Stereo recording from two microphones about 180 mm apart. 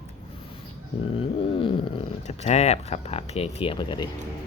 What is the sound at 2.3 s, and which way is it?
Speech, 35° left (ahead or behind).